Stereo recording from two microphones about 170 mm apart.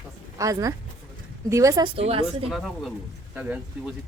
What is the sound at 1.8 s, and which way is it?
Speech, 35° right (ahead or behind).